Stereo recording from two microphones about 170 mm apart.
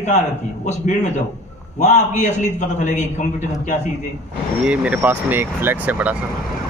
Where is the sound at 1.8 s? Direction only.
45° left (ahead or behind).